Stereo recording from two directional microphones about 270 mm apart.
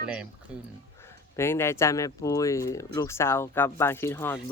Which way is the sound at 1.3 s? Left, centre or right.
Centre.